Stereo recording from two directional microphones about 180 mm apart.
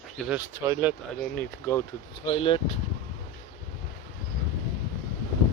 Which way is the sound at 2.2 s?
30° left (ahead or behind).